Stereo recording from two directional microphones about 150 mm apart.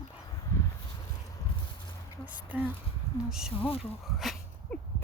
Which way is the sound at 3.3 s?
5° right (ahead or behind).